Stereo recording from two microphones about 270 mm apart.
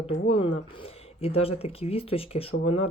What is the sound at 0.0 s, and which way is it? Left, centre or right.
Speech, left.